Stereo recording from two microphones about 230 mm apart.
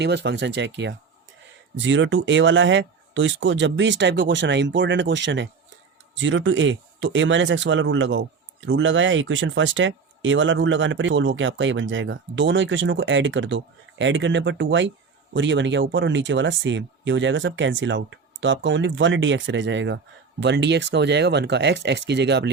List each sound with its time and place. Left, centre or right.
0.0 s speech: right